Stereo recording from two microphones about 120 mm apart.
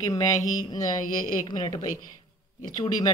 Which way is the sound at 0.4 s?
90° left.